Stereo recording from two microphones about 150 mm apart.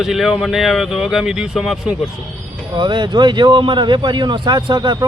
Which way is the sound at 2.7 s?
30° right (ahead or behind).